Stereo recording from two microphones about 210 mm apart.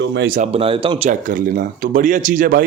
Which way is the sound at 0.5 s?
25° right (ahead or behind).